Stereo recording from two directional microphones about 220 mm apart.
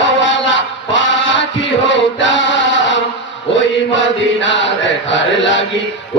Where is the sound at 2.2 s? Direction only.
55° left (ahead or behind).